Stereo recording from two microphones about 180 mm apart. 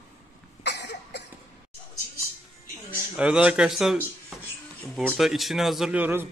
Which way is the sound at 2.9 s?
5° right (ahead or behind).